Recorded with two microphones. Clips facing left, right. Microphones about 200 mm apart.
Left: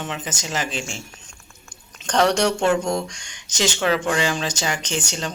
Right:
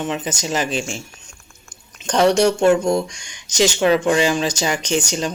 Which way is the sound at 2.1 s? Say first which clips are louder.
Right 4 dB; 10° right (ahead or behind).